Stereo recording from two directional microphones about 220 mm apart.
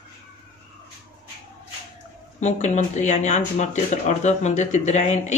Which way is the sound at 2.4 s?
30° left (ahead or behind).